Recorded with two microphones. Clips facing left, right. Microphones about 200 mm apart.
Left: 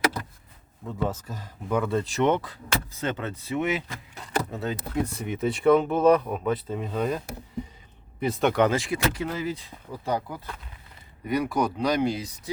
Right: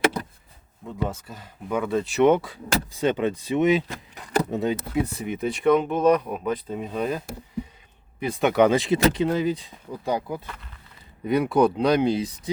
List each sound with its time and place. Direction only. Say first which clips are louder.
0.9 s speech: even; 5° right (ahead or behind)
4.9 s speech: right 2 dB; centre (ahead or behind)
8.3 s speech: right 3 dB; 5° right (ahead or behind); by 12.3 s 20° right (ahead or behind)